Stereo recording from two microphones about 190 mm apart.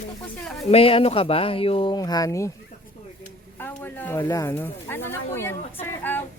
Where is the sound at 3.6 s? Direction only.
10° left (ahead or behind).